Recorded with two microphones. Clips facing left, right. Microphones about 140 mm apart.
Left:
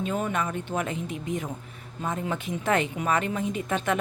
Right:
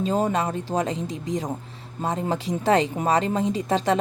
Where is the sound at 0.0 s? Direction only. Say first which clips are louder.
Right 5 dB; 30° right (ahead or behind).